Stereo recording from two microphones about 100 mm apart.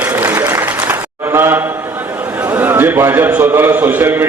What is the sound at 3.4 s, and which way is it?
Speech, 25° right (ahead or behind).